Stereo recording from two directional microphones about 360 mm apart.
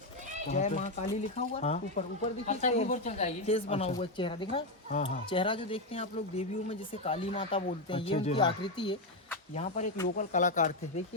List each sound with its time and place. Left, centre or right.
0.4 s speech: centre